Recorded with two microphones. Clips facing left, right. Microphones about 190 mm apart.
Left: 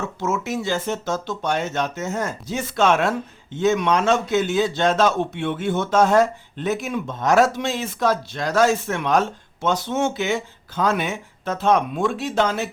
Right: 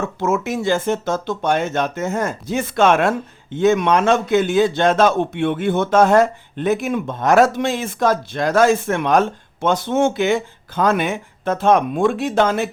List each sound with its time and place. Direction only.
0.2 s speech: 55° right (ahead or behind)